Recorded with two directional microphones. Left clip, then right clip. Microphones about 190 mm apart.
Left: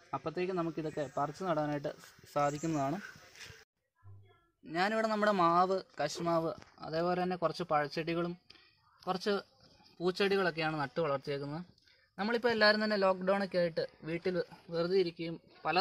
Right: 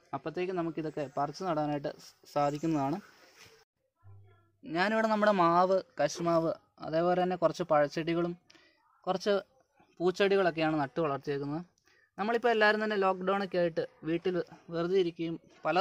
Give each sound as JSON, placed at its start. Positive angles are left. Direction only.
{"t": 0.1, "sound": "speech", "side_deg": -30}
{"t": 4.6, "sound": "speech", "side_deg": -55}